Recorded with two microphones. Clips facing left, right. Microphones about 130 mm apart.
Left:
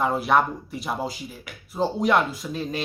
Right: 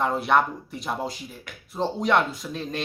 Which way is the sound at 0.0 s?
5° left (ahead or behind).